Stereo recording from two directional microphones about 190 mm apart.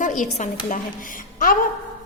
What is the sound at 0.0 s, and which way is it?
A woman's voice, 40° left (ahead or behind).